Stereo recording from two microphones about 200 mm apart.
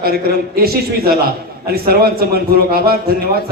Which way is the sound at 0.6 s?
50° right (ahead or behind).